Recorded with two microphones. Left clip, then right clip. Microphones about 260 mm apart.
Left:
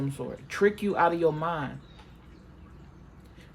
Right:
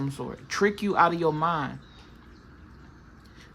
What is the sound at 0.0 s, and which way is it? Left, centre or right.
A woman's voice, centre.